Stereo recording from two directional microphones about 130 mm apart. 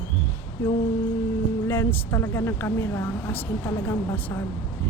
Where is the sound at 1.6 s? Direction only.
20° left (ahead or behind).